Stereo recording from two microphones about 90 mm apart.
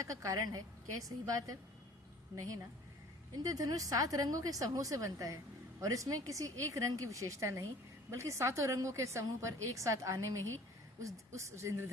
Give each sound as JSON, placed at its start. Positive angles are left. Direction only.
{"t": 0.0, "sound": "a woman's voice", "side_deg": -40}
{"t": 3.4, "sound": "a woman's voice", "side_deg": -40}